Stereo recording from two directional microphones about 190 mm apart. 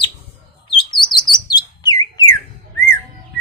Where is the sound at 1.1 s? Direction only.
20° left (ahead or behind).